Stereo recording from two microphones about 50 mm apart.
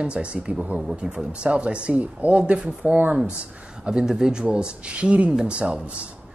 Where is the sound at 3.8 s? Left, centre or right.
Centre.